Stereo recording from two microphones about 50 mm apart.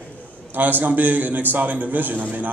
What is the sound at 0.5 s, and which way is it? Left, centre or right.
A man's voice, right.